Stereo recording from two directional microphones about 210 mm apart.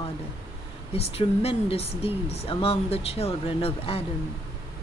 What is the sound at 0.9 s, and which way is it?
Speech, 30° left (ahead or behind).